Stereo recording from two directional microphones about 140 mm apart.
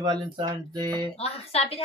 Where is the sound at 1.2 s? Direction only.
45° left (ahead or behind).